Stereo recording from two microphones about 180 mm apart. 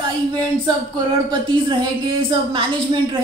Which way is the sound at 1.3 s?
25° right (ahead or behind).